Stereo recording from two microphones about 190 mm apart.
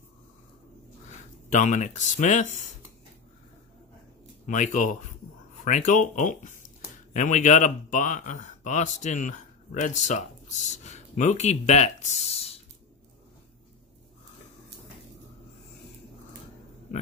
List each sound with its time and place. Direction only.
1.5 s speech: 40° left (ahead or behind)
4.5 s speech: 40° left (ahead or behind)